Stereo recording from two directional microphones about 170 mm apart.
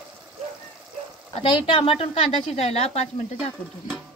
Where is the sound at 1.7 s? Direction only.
35° left (ahead or behind).